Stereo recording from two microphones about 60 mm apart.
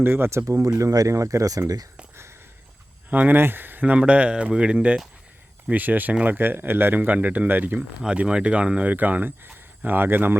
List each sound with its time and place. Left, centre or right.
0.0 s speech: right
0.6 s speech: right
3.1 s speech: right
5.7 s speech: right
7.8 s speech: centre
8.9 s speech: right